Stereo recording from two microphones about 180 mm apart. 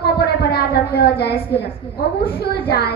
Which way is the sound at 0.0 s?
65° left (ahead or behind).